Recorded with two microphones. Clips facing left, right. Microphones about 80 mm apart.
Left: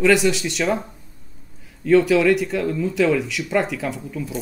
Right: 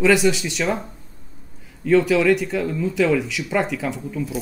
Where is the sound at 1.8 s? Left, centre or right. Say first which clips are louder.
Left 1 dB; centre.